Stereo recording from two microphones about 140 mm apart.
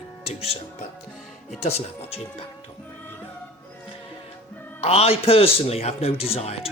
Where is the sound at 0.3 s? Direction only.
45° left (ahead or behind).